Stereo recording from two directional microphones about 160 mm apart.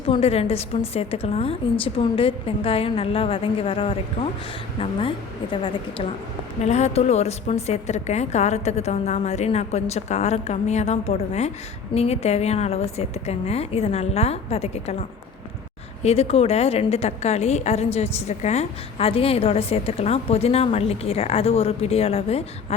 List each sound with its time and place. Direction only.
0.1 s a woman's voice: 40° left (ahead or behind)
6.6 s a woman's voice: 45° left (ahead or behind)
16.0 s a woman's voice: 40° left (ahead or behind)